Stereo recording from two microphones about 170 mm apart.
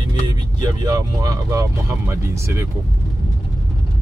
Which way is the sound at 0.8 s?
20° right (ahead or behind).